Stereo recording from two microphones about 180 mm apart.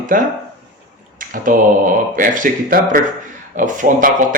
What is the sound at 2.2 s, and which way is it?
A man's voice, 45° right (ahead or behind).